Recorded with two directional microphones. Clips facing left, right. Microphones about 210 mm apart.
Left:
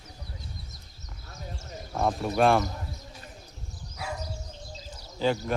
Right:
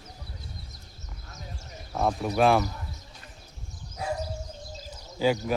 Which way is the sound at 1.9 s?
Centre (ahead or behind).